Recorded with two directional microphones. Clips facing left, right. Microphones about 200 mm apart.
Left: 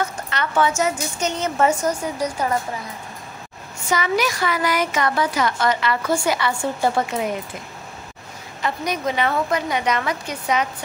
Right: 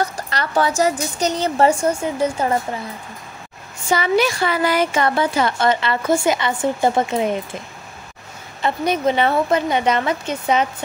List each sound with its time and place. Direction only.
0.0 s speech: 35° right (ahead or behind)
3.9 s a woman's voice: 30° right (ahead or behind)
8.5 s a woman's voice: 30° right (ahead or behind)